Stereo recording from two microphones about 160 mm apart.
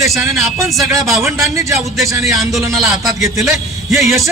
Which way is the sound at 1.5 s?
20° right (ahead or behind).